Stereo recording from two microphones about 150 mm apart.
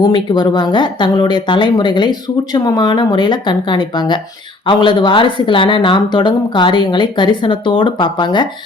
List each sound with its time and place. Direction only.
0.0 s speech: 30° left (ahead or behind)